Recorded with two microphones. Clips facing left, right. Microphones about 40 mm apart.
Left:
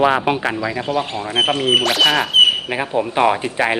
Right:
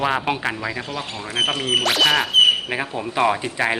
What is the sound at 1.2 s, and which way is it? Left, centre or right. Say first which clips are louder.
Speech: left 1 dB; centre.